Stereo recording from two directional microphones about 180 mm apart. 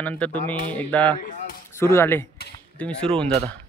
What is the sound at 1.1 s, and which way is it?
Speech, 50° left (ahead or behind).